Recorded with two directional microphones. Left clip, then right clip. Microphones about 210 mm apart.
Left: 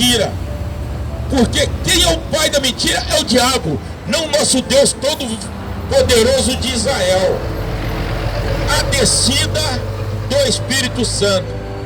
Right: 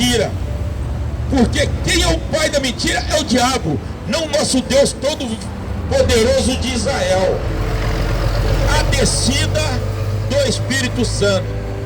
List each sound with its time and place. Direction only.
0.0 s a sound: 15° left (ahead or behind)
1.3 s a man's voice: 20° left (ahead or behind)
8.6 s speech: 15° left (ahead or behind)